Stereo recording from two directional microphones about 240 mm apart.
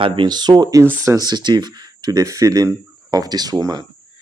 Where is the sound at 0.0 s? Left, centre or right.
Centre.